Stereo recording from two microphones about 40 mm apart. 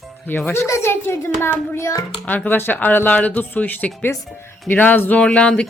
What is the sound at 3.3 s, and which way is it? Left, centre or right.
Speech, left.